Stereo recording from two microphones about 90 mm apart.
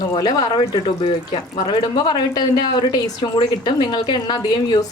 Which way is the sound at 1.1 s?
60° left (ahead or behind).